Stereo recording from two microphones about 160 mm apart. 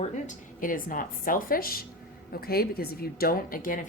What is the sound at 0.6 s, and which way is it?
A woman's voice, 60° left (ahead or behind).